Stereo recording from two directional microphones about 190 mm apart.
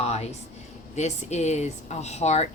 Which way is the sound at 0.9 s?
35° left (ahead or behind).